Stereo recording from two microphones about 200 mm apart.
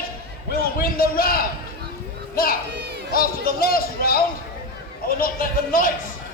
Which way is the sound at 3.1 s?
45° left (ahead or behind).